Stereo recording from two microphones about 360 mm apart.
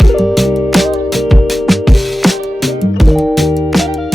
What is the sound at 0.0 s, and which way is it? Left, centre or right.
Music, centre.